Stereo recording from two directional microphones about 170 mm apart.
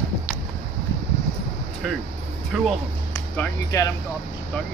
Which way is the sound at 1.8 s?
Centre (ahead or behind).